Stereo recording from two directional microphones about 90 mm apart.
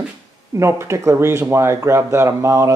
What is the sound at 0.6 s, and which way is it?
Speech, 30° right (ahead or behind).